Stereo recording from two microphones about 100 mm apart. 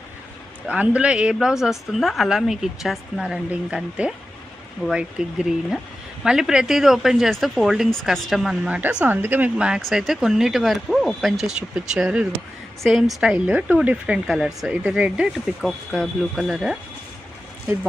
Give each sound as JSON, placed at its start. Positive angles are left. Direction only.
{"t": 0.7, "sound": "speech", "side_deg": -15}
{"t": 13.2, "sound": "speech", "side_deg": -10}
{"t": 15.9, "sound": "speech", "side_deg": 5}